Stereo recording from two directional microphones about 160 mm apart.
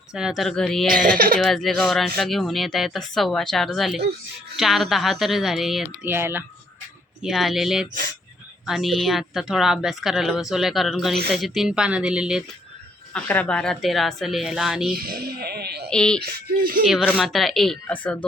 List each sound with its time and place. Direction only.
0.1 s speech: 5° right (ahead or behind)
6.1 s speech: 15° right (ahead or behind)
7.2 s speech: centre (ahead or behind)
13.1 s speech: 10° left (ahead or behind)
14.9 s speech: 70° right (ahead or behind)
15.9 s speech: 5° left (ahead or behind)
16.2 s speech: 70° right (ahead or behind)
16.8 s speech: 5° right (ahead or behind)